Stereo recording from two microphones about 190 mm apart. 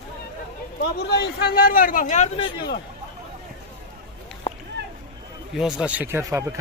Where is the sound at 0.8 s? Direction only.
60° left (ahead or behind); by 2.2 s 40° left (ahead or behind).